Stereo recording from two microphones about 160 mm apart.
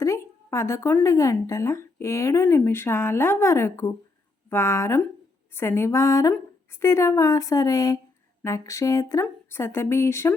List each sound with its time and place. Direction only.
0.0 s a woman's voice: 20° left (ahead or behind)